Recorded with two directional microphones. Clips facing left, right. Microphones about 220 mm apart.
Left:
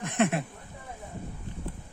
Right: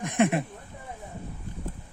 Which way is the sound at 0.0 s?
15° right (ahead or behind).